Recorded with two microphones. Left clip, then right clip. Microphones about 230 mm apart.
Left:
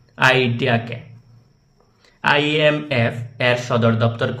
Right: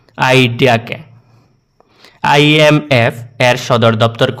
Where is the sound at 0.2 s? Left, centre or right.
Right.